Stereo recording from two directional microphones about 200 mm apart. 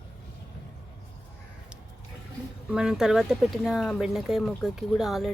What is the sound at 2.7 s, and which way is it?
Speech, 5° right (ahead or behind).